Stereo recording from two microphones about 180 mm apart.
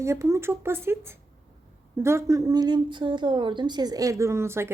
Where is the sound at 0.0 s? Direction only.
15° right (ahead or behind).